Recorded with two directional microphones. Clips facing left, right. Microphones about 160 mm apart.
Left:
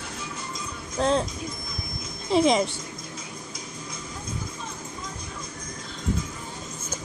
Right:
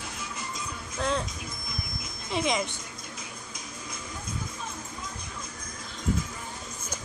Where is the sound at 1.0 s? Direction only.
30° left (ahead or behind).